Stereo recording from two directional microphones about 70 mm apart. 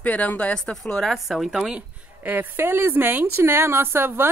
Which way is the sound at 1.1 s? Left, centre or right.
Centre.